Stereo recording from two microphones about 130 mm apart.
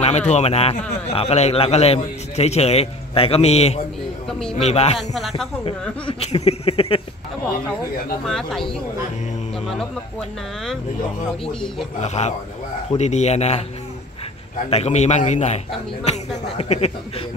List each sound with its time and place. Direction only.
0.0 s a man's voice: 60° left (ahead or behind)
4.3 s speech: 5° left (ahead or behind)
4.6 s a man's voice: 55° left (ahead or behind)
4.9 s speech: centre (ahead or behind)
5.7 s a man's voice: 45° left (ahead or behind)
8.3 s speech: 5° left (ahead or behind)
12.0 s a man's voice: 60° left (ahead or behind)
14.7 s a man's voice: 55° left (ahead or behind)